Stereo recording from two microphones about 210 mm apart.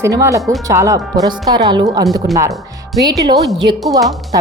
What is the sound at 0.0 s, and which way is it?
Speech, 15° right (ahead or behind).